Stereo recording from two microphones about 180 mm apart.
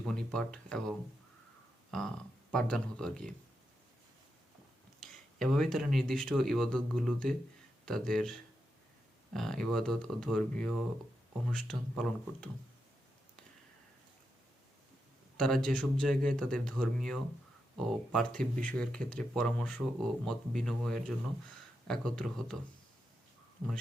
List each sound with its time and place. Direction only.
0.1 s speech: 5° left (ahead or behind)
2.5 s speech: 5° left (ahead or behind)
4.9 s speech: centre (ahead or behind)
15.4 s speech: 5° left (ahead or behind)